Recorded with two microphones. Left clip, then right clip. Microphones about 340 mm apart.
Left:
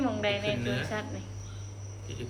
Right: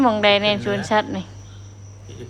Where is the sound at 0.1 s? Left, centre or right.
Centre.